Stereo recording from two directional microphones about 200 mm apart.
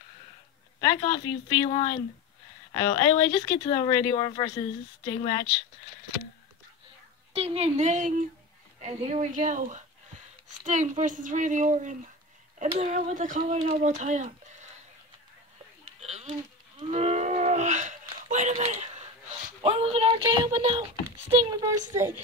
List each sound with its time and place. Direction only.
0.7 s a woman's voice: 25° left (ahead or behind)
7.3 s speech: 30° right (ahead or behind)
16.0 s a sound: 35° right (ahead or behind)
16.8 s livestock: 30° right (ahead or behind)
19.6 s speech: 30° right (ahead or behind)
21.5 s a child's voice: 15° right (ahead or behind)